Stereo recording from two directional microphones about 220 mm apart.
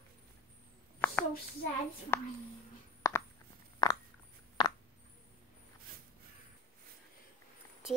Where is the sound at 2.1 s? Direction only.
10° left (ahead or behind).